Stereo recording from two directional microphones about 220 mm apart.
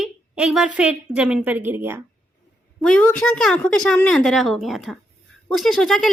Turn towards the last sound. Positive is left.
turn(degrees=0)  # may be behind; listen again after turning